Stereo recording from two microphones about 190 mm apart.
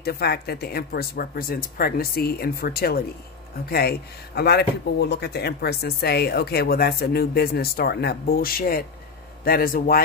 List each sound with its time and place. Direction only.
0.0 s speech: 55° left (ahead or behind)
4.4 s speech: 60° left (ahead or behind)